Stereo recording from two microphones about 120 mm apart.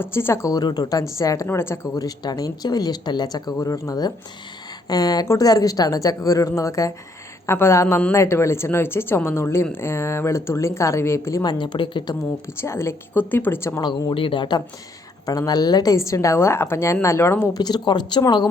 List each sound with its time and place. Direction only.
0.0 s a woman's voice: 20° left (ahead or behind)
0.5 s a woman's voice: 30° left (ahead or behind)
11.4 s speech: 40° left (ahead or behind)
12.5 s a woman's voice: 20° left (ahead or behind)
13.8 s a woman's voice: 45° left (ahead or behind); by 17.5 s 20° left (ahead or behind)
17.5 s speech: 35° left (ahead or behind)